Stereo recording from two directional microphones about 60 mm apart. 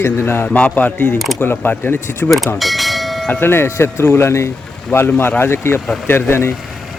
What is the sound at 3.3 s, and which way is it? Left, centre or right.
Speech, left.